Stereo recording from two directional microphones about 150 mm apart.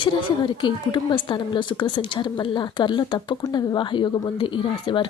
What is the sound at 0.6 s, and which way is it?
Speech, 30° left (ahead or behind).